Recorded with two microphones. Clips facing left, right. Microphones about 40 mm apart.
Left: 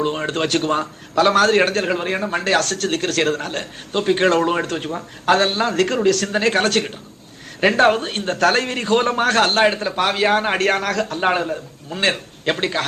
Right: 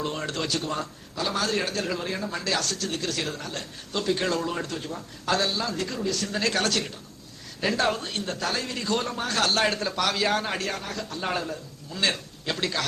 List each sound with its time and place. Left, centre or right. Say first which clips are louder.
0.0 s a man's voice: left 9 dB; left
6.4 s a man's voice: left 6 dB; left
11.2 s a man's voice: left 7 dB; left